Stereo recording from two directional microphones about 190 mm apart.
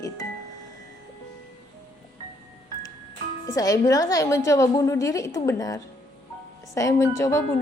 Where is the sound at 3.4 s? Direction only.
20° left (ahead or behind).